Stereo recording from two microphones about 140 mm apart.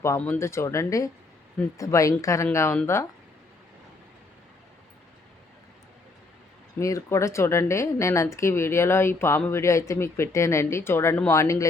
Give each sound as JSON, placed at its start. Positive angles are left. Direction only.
{"t": 0.0, "sound": "speech", "side_deg": 20}
{"t": 6.7, "sound": "speech", "side_deg": 20}